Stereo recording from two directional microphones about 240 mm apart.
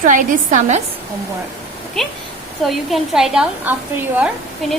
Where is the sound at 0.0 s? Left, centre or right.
Right.